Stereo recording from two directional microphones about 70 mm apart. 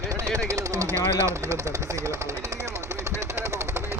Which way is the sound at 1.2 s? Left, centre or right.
Right.